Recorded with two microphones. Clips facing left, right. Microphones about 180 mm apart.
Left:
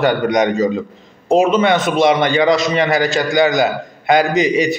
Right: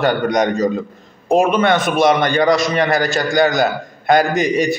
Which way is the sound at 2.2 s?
45° right (ahead or behind).